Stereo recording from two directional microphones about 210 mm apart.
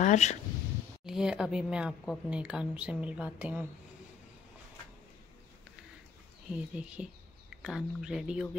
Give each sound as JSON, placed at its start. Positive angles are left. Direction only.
{"t": 0.0, "sound": "speech", "side_deg": 35}
{"t": 1.0, "sound": "a woman's voice", "side_deg": -5}
{"t": 6.5, "sound": "a woman's voice", "side_deg": -5}